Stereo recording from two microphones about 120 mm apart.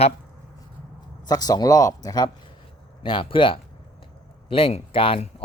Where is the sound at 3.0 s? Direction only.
45° left (ahead or behind).